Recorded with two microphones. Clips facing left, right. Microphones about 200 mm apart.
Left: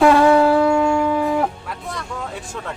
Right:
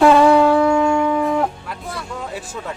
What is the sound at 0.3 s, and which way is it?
Shofar, centre (ahead or behind).